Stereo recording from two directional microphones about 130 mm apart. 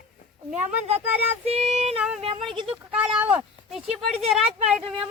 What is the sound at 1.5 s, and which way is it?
Female singing, 50° right (ahead or behind).